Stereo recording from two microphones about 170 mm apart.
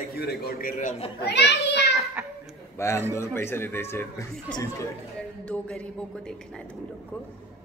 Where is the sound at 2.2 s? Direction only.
5° right (ahead or behind).